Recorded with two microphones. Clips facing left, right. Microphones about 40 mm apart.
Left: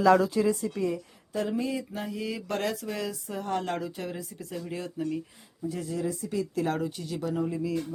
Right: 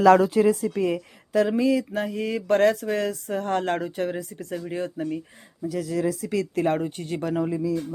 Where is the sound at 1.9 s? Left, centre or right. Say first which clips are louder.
Right 7 dB; right.